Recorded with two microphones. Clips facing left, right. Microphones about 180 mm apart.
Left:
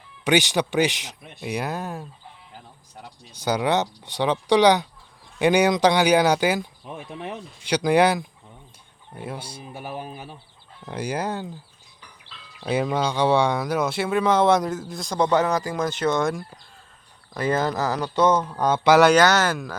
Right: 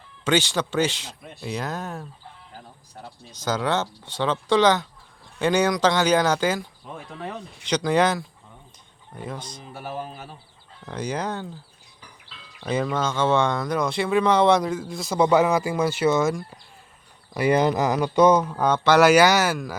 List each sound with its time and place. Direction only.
0.3 s speech: 15° left (ahead or behind)
12.5 s speech: 10° left (ahead or behind)
17.3 s speech: 15° right (ahead or behind)